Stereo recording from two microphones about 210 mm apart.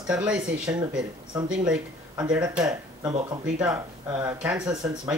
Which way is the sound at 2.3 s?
5° right (ahead or behind).